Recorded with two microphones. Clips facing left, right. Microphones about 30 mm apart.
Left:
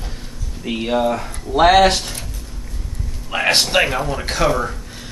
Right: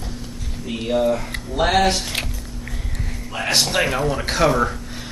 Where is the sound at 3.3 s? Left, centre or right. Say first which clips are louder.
Left 7 dB; left.